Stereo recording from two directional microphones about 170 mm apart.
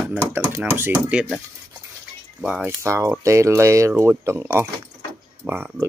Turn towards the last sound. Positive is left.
turn(degrees=-10)  # may be behind; listen again after turning